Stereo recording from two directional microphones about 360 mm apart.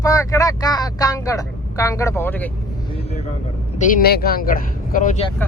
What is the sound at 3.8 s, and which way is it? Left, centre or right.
Speech, left.